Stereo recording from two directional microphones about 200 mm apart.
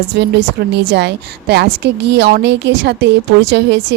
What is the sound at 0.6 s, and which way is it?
Speech, 60° right (ahead or behind).